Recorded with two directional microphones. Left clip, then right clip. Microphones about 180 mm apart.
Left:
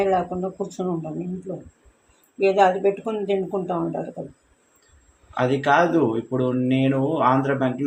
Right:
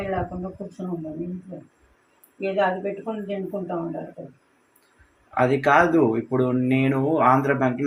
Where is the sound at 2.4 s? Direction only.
65° left (ahead or behind).